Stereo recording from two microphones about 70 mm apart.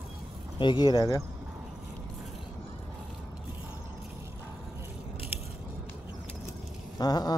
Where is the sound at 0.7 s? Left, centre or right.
Left.